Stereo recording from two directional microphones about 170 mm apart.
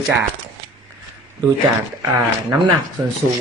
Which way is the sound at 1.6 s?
20° right (ahead or behind).